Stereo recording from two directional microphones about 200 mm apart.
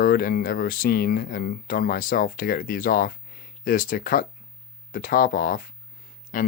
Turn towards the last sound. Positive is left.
turn(degrees=45)  # may be behind; listen again after turning